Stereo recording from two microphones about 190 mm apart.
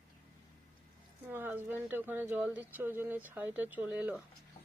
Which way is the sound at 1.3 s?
10° right (ahead or behind).